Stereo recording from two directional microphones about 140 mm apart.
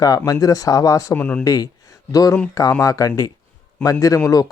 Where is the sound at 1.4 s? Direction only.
25° left (ahead or behind).